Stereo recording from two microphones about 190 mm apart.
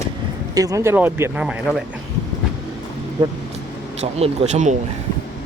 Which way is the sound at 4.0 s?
35° right (ahead or behind).